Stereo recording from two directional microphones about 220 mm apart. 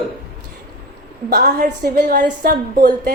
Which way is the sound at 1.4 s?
40° right (ahead or behind).